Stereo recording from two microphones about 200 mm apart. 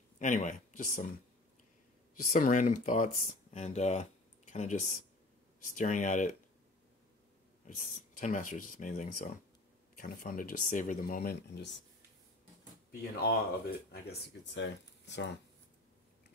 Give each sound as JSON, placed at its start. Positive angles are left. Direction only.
{"t": 0.2, "sound": "speech", "side_deg": 40}
{"t": 2.2, "sound": "speech", "side_deg": 40}
{"t": 7.6, "sound": "speech", "side_deg": 40}
{"t": 13.0, "sound": "speech", "side_deg": 50}